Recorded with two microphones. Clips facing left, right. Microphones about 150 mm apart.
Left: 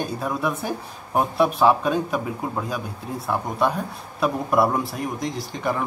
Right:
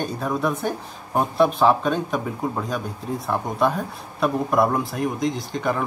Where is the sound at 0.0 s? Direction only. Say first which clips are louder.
Right 1 dB; 5° left (ahead or behind).